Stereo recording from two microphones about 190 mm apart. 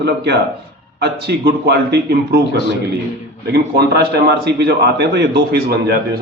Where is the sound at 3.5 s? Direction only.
60° right (ahead or behind).